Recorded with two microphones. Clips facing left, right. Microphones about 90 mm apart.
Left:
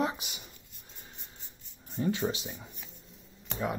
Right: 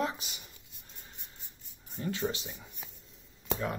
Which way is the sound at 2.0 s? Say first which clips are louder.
Left 4 dB; 15° left (ahead or behind).